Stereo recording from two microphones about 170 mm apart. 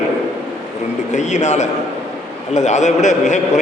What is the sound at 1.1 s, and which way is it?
A man's voice, 45° left (ahead or behind).